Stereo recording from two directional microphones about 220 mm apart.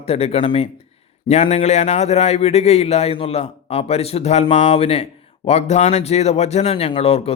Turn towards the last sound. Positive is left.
turn(degrees=25)  # may be behind; listen again after turning